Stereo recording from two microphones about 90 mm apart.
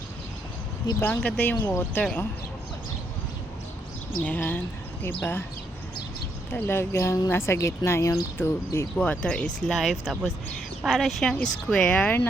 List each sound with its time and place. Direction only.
0.9 s speech: 20° left (ahead or behind)
4.2 s speech: 20° left (ahead or behind)
6.5 s speech: 25° left (ahead or behind)
9.0 s speech: 15° left (ahead or behind)
9.6 s speech: centre (ahead or behind)
11.9 s speech: 20° left (ahead or behind)